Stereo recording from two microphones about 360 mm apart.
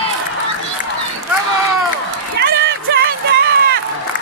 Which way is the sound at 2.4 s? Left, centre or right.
Right.